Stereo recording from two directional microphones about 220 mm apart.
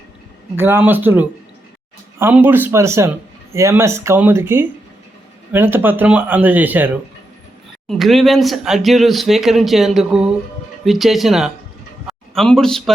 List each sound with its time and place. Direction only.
0.5 s a man's voice: 10° right (ahead or behind)